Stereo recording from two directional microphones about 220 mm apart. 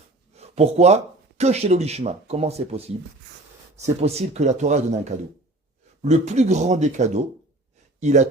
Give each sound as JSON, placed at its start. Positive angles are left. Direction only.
{"t": 0.3, "sound": "speech", "side_deg": -30}